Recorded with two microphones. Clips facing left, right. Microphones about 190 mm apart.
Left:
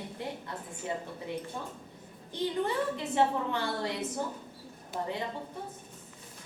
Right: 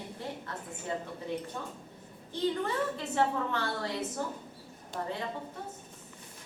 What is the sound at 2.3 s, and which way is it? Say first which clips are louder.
A woman's voice: even; 15° left (ahead or behind).